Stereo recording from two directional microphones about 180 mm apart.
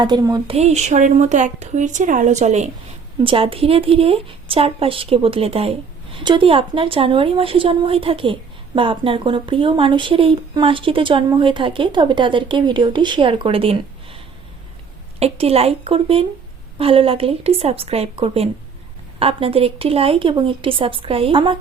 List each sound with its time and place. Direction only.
0.0 s speech: 20° right (ahead or behind)
0.5 s speech: 35° right (ahead or behind)
15.2 s speech: 35° right (ahead or behind)